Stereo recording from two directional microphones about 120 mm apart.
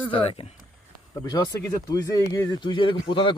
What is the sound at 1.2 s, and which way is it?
Speech, 30° left (ahead or behind).